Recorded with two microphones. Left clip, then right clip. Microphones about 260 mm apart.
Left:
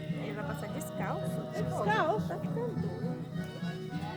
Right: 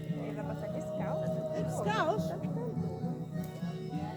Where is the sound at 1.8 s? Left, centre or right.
Right.